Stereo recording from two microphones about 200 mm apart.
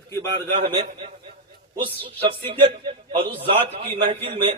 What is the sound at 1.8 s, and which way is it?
A man's voice, 25° right (ahead or behind).